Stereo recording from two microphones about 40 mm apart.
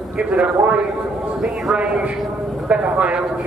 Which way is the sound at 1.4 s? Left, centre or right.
Centre.